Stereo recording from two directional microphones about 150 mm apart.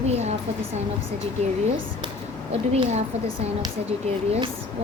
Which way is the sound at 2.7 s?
45° right (ahead or behind).